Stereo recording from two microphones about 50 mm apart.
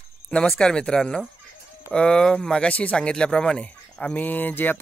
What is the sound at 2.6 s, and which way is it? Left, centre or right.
Speech, left.